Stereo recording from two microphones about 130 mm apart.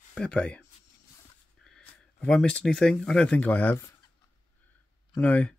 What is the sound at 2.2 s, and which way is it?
Speech, 5° left (ahead or behind).